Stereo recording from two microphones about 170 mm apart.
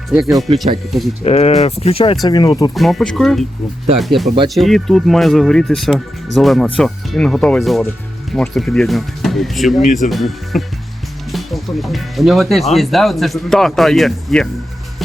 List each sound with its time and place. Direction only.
0.1 s speech: centre (ahead or behind)
1.2 s speech: 40° left (ahead or behind)
2.2 s speech: 25° left (ahead or behind)
2.7 s speech: centre (ahead or behind)